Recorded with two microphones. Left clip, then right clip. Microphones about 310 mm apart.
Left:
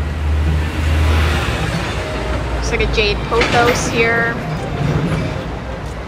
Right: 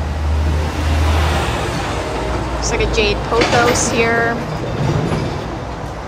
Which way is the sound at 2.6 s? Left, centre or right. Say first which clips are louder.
Even; centre.